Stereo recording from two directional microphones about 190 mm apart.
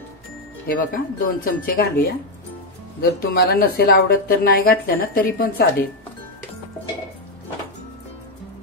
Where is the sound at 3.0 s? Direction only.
55° left (ahead or behind).